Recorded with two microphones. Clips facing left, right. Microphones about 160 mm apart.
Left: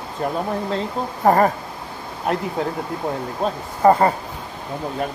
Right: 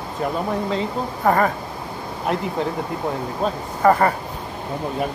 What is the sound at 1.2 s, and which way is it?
Speech, 35° left (ahead or behind).